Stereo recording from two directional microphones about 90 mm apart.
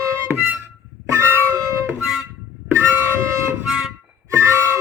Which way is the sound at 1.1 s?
30° right (ahead or behind).